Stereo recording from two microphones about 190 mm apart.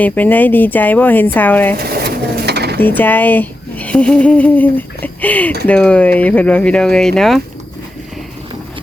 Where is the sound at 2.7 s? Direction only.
10° left (ahead or behind).